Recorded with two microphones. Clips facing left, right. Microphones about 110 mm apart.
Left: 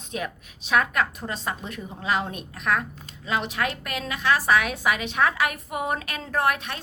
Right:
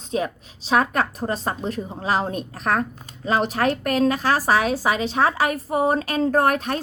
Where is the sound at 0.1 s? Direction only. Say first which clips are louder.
Right 7 dB; 30° right (ahead or behind).